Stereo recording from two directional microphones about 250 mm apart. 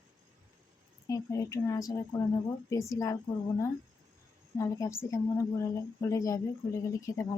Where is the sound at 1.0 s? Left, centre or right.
Centre.